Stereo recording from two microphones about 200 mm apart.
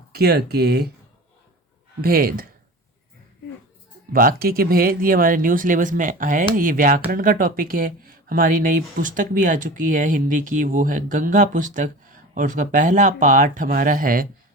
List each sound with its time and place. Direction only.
0.1 s speech: 50° right (ahead or behind)
2.0 s speech: 50° right (ahead or behind)
4.1 s speech: 45° right (ahead or behind)